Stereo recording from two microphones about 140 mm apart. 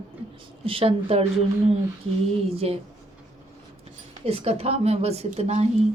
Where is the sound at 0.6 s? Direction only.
40° right (ahead or behind).